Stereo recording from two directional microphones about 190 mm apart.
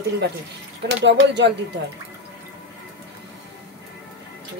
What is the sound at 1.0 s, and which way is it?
Speech, 65° right (ahead or behind).